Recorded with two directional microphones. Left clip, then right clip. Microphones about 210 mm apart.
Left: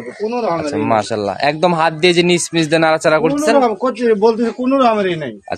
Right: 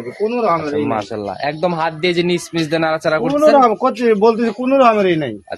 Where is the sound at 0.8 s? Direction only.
50° left (ahead or behind).